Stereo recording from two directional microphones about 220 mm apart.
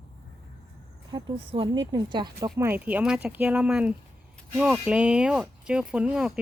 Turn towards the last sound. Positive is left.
turn(degrees=-5)  # may be behind; listen again after turning